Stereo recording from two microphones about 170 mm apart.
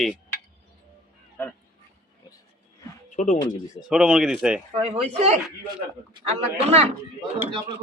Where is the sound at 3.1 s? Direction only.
45° left (ahead or behind).